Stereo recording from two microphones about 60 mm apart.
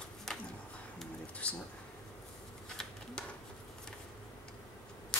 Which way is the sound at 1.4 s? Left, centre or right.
Left.